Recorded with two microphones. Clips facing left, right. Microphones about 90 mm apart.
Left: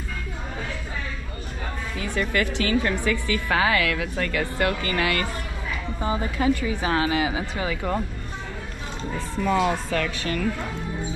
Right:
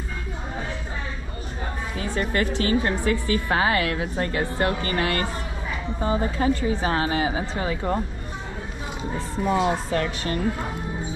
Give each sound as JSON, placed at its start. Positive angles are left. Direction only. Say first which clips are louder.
{"t": 2.0, "sound": "a woman's voice", "louder": "even", "side_deg": -20}
{"t": 5.9, "sound": "a woman's voice", "louder": "right 2 dB", "side_deg": 10}
{"t": 6.2, "sound": "a woman's voice", "louder": "right 1 dB", "side_deg": -30}
{"t": 9.1, "sound": "a woman's voice", "louder": "even", "side_deg": -25}